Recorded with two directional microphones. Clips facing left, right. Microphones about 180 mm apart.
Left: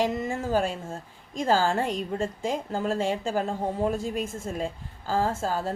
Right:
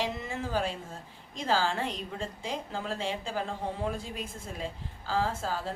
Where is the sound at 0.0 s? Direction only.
45° left (ahead or behind).